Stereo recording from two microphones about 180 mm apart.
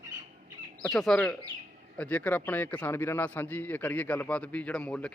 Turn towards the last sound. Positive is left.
turn(degrees=5)  # may be behind; listen again after turning